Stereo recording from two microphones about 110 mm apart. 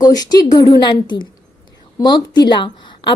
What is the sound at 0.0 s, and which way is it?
A woman's voice, 35° left (ahead or behind).